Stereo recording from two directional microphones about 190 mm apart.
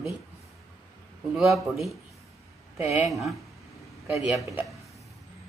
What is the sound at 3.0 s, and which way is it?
Speech, centre (ahead or behind).